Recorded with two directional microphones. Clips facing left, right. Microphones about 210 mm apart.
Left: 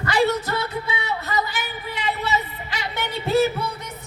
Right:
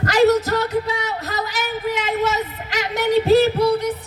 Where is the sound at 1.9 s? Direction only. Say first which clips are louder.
Right 2 dB; 90° right.